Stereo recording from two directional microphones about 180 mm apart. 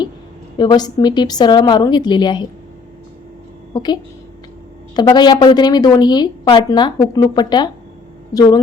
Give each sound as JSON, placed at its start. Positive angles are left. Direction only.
{"t": 0.6, "sound": "a woman's voice", "side_deg": 25}
{"t": 3.7, "sound": "a woman's voice", "side_deg": 25}
{"t": 4.9, "sound": "a woman's voice", "side_deg": 25}